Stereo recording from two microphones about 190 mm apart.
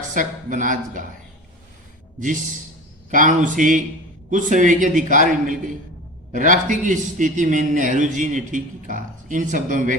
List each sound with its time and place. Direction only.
0.1 s a man's voice: 40° right (ahead or behind)
3.1 s a man's voice: 45° right (ahead or behind)